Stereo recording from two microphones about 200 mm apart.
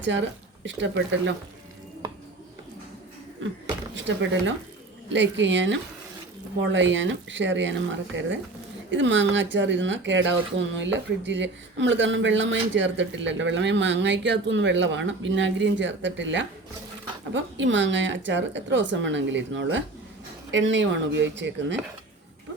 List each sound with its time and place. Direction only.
0.0 s speech: 65° right (ahead or behind)
3.9 s speech: 65° right (ahead or behind)